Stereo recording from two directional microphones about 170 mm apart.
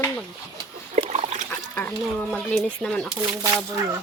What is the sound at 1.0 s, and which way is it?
Trickle, 40° right (ahead or behind).